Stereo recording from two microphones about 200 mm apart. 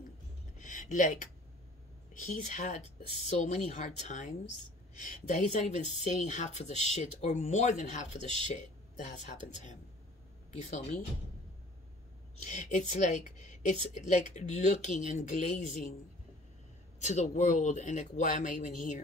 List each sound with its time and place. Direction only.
0.6 s a woman's voice: 40° left (ahead or behind)
12.4 s a woman's voice: 35° left (ahead or behind)
17.0 s a woman's voice: 35° left (ahead or behind)